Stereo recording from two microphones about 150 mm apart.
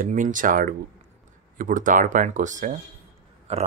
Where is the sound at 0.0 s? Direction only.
60° right (ahead or behind).